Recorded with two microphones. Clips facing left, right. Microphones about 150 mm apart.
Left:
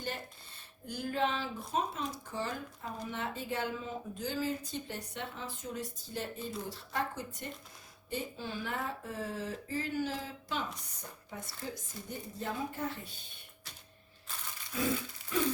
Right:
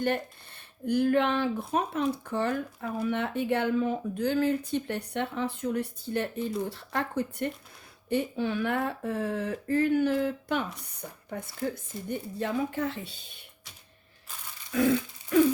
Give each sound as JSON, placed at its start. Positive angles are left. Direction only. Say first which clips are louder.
{"t": 0.0, "sound": "speech", "louder": "right 12 dB", "side_deg": -60}
{"t": 14.7, "sound": "speech", "louder": "right 9 dB", "side_deg": -65}